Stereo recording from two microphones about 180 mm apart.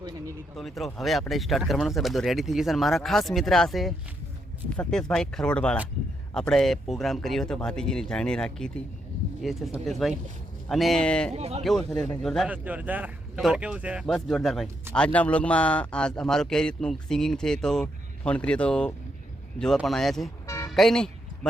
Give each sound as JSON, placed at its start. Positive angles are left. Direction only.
{"t": 0.5, "sound": "a man's voice", "side_deg": 0}
{"t": 11.3, "sound": "speech", "side_deg": -35}
{"t": 11.6, "sound": "a man's voice", "side_deg": 0}
{"t": 12.5, "sound": "a man's voice", "side_deg": -10}